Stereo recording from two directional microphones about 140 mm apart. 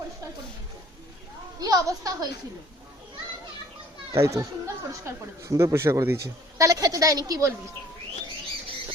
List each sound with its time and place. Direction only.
1.5 s a woman's voice: 25° right (ahead or behind)
4.1 s speech: 20° right (ahead or behind)